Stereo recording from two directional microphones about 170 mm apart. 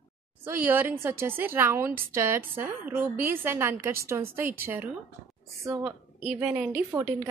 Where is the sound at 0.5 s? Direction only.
10° right (ahead or behind).